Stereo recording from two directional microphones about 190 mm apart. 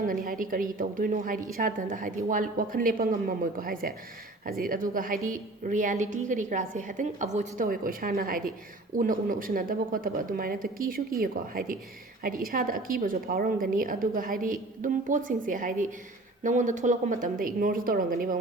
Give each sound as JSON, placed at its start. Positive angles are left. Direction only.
{"t": 0.0, "sound": "a woman's voice", "side_deg": -45}